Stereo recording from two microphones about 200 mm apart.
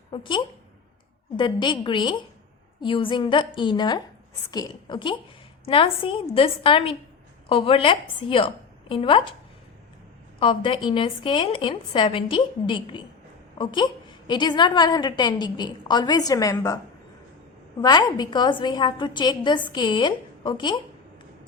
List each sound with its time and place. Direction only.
0.1 s a woman's voice: 25° left (ahead or behind)
10.4 s a woman's voice: 25° left (ahead or behind)